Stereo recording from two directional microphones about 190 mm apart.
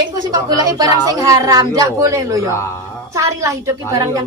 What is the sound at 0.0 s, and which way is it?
A woman's voice, 20° right (ahead or behind).